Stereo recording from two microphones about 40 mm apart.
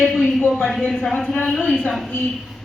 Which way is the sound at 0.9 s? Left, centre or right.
Centre.